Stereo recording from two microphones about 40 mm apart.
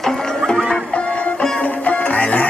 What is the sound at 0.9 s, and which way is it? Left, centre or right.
Music, left.